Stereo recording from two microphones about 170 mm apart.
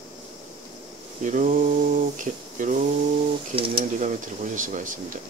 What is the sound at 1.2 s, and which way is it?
Speech, 45° right (ahead or behind).